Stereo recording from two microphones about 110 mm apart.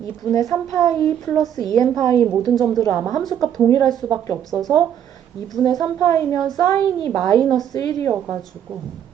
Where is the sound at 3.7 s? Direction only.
40° left (ahead or behind).